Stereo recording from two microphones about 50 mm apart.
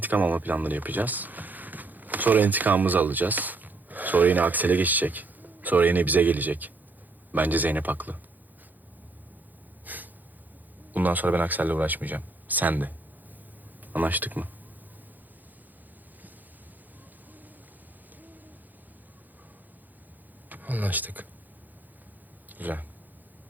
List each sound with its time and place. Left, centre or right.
0.0 s speech: right
9.8 s snort: right
10.9 s speech: right
13.9 s speech: right
20.5 s speech: right
22.4 s speech: right